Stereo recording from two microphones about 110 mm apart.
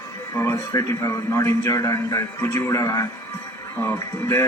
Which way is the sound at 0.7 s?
30° left (ahead or behind).